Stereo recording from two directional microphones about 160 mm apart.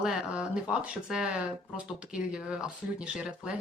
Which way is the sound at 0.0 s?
5° right (ahead or behind).